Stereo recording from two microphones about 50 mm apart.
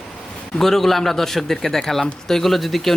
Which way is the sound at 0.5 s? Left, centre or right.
Centre.